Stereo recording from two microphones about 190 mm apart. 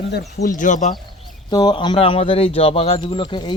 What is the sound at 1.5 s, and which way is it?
Speech, 20° left (ahead or behind).